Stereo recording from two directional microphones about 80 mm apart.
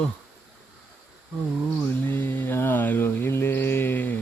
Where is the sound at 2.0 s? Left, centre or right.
Left.